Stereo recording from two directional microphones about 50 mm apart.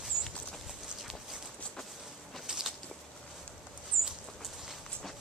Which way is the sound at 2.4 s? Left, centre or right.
Centre.